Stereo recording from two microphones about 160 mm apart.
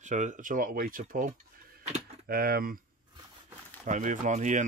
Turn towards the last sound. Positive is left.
turn(degrees=-50)  # may be behind; listen again after turning